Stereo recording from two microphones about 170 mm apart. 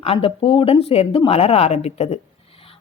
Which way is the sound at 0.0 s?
35° left (ahead or behind).